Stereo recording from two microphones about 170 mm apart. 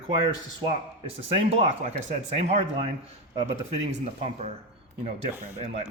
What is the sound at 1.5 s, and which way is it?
Speech, 40° right (ahead or behind).